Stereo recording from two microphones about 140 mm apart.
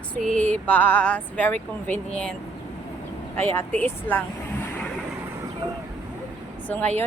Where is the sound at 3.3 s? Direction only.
15° left (ahead or behind).